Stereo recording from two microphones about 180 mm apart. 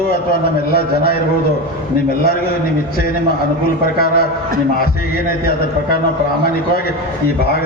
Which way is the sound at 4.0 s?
55° left (ahead or behind).